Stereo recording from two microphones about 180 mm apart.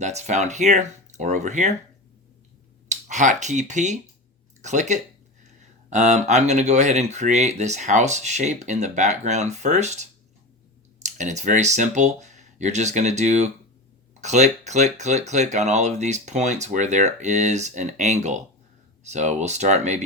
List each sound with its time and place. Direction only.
0.0 s speech: 40° right (ahead or behind)
2.9 s speech: 40° right (ahead or behind)
4.6 s a sound: 40° right (ahead or behind)
5.9 s speech: 40° right (ahead or behind)